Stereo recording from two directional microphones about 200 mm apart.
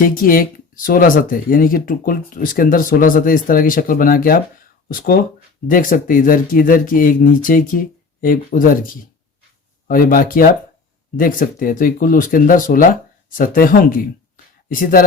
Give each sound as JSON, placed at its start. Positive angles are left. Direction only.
{"t": 0.0, "sound": "speech", "side_deg": 45}
{"t": 9.8, "sound": "speech", "side_deg": 45}